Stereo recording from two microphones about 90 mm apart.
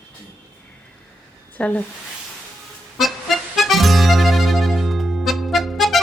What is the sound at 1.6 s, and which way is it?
Speech, 15° left (ahead or behind).